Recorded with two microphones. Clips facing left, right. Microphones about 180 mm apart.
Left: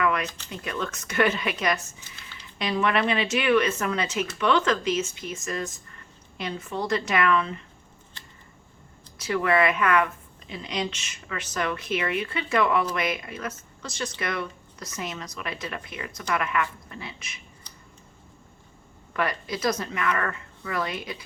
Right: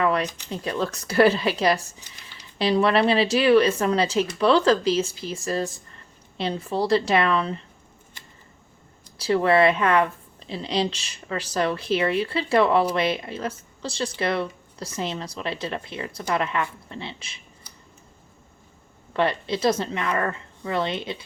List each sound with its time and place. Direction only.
0.0 s a sound: 35° right (ahead or behind)
0.5 s speech: 30° right (ahead or behind)
9.1 s speech: 30° right (ahead or behind)
19.1 s a woman's voice: 30° right (ahead or behind)